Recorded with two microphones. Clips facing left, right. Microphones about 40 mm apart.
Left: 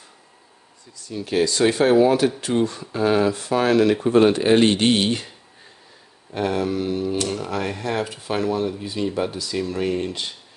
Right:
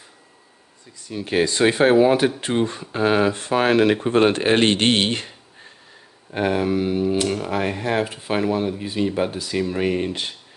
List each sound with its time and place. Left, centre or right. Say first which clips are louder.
0.9 s speech: right 1 dB; right
6.3 s speech: right 2 dB; right